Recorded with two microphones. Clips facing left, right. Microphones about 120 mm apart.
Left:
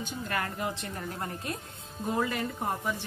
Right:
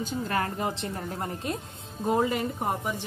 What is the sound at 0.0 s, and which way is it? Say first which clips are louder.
Speech: right 5 dB; 30° right (ahead or behind).